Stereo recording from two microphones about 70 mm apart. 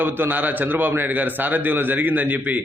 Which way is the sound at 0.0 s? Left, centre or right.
Right.